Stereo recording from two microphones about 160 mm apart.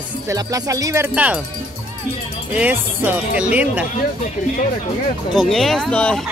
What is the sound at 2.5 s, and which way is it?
Speech, 10° right (ahead or behind).